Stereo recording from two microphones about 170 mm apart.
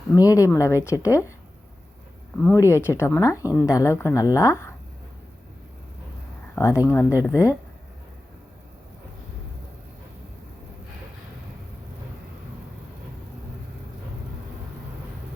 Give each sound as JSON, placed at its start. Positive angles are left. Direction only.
{"t": 0.2, "sound": "a woman's voice", "side_deg": 20}
{"t": 2.4, "sound": "a woman's voice", "side_deg": 10}
{"t": 6.6, "sound": "a woman's voice", "side_deg": 15}